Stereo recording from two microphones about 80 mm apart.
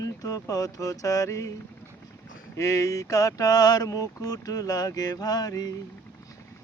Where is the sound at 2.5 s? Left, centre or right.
Left.